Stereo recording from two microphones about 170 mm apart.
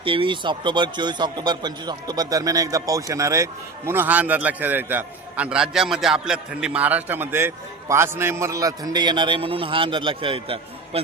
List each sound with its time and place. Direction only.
0.0 s a man's voice: 30° right (ahead or behind)